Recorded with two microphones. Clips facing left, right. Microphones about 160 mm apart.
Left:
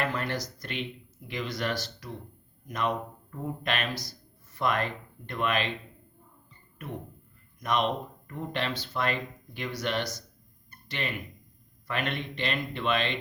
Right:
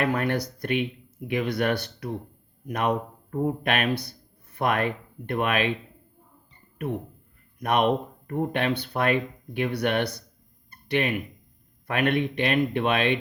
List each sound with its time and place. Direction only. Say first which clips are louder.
0.0 s speech: right 6 dB; 55° right (ahead or behind)
7.6 s speech: right 5 dB; 60° right (ahead or behind)